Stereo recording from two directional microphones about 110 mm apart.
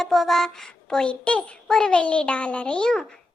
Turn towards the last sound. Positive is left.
turn(degrees=5)  # may be behind; listen again after turning